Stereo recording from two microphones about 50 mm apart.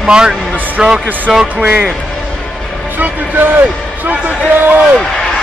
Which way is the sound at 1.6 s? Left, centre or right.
Right.